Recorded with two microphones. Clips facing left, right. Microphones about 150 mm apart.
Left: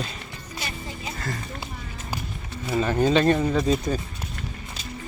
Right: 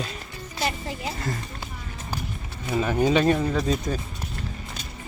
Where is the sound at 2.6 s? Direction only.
5° right (ahead or behind).